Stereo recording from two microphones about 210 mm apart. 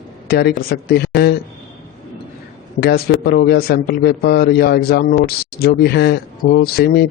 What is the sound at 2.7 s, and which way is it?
A man's voice, 50° left (ahead or behind).